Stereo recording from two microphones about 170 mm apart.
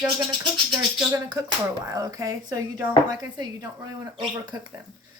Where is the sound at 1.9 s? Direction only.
20° right (ahead or behind).